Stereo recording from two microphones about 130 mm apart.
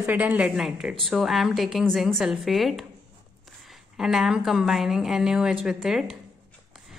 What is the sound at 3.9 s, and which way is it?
A woman's voice, 5° right (ahead or behind).